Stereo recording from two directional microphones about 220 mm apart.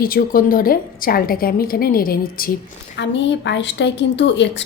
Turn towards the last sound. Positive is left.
turn(degrees=55)  # may be behind; listen again after turning